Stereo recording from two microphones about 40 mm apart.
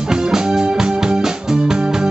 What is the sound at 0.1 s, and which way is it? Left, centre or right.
Music, centre.